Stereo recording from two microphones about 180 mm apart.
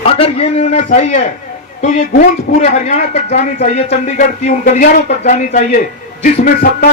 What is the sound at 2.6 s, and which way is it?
Speech, 35° left (ahead or behind).